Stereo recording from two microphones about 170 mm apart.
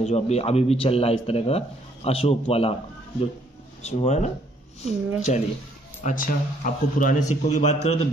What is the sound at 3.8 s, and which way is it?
A man's voice, 40° left (ahead or behind).